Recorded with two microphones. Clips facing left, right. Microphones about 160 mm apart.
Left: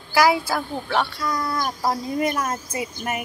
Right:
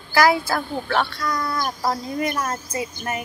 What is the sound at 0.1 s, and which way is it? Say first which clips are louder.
Speech: right 1 dB; 10° left (ahead or behind).